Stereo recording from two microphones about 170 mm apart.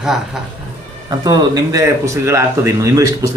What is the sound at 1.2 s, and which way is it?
Speech, 20° right (ahead or behind).